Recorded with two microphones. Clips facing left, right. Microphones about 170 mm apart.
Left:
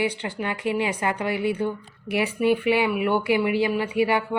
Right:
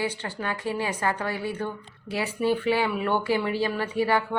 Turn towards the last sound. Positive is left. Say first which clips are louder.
# left 2 dB
turn(degrees=15)  # may be behind; listen again after turning